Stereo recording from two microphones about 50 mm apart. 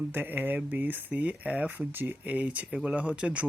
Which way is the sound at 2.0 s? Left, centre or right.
Right.